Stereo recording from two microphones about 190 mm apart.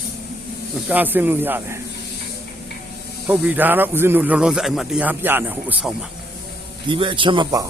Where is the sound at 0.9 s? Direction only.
10° right (ahead or behind).